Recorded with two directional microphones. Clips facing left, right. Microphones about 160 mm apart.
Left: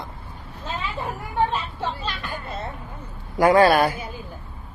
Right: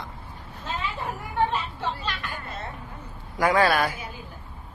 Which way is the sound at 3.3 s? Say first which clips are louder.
Left 6 dB; 40° left (ahead or behind).